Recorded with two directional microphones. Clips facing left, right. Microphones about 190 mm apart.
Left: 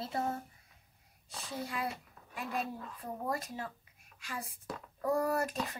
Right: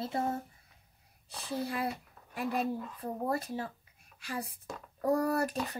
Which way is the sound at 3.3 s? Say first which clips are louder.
Right 3 dB; 30° right (ahead or behind).